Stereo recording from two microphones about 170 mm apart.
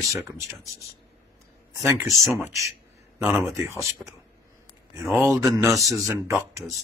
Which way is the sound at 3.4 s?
15° right (ahead or behind).